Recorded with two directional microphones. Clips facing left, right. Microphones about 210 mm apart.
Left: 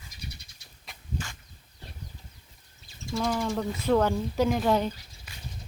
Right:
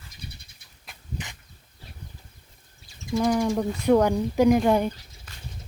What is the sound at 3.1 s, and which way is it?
Speech, 15° right (ahead or behind).